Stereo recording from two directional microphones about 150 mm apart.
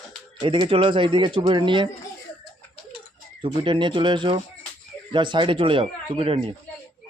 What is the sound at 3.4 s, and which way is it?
Speech, 35° right (ahead or behind).